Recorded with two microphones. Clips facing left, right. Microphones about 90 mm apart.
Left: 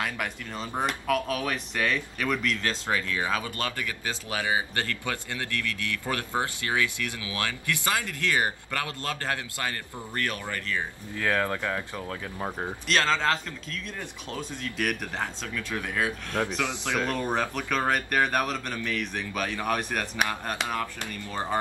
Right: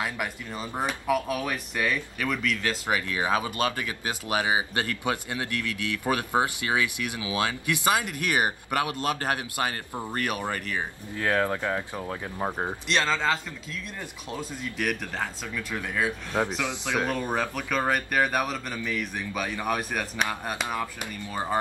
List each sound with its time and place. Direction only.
0.0 s speech: 5° right (ahead or behind)
13.1 s speech: centre (ahead or behind)
15.9 s speech: centre (ahead or behind)
16.5 s speech: 15° right (ahead or behind)